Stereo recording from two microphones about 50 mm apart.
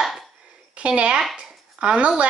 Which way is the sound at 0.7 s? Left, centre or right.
Right.